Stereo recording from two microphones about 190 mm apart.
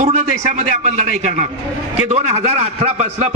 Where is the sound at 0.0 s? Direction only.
40° right (ahead or behind).